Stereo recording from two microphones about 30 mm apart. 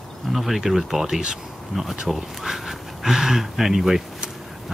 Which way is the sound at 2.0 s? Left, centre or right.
Centre.